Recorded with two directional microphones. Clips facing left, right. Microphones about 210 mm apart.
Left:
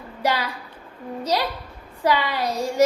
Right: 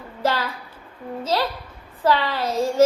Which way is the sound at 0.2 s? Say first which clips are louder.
Right 1 dB; 15° left (ahead or behind).